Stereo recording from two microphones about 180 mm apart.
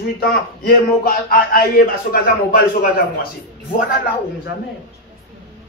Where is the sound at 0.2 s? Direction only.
55° left (ahead or behind).